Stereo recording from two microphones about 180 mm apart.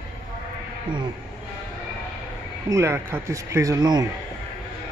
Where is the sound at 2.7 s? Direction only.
15° right (ahead or behind).